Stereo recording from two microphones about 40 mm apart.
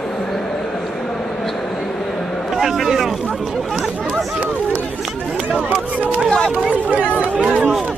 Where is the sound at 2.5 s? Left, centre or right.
Centre.